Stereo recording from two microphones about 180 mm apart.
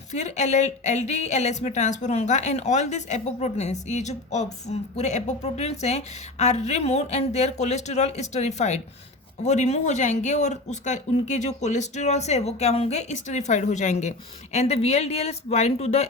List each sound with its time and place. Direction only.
0.1 s speech: 40° left (ahead or behind)